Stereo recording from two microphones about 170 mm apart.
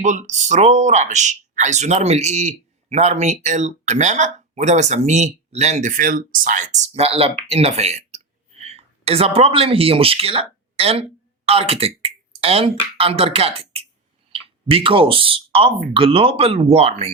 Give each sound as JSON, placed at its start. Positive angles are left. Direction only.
{"t": 0.0, "sound": "speech", "side_deg": -45}